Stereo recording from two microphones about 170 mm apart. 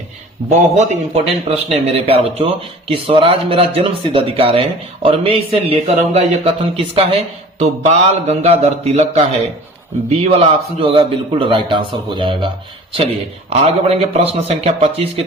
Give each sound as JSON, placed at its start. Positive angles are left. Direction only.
{"t": 0.8, "sound": "speech", "side_deg": -40}
{"t": 13.5, "sound": "speech", "side_deg": -40}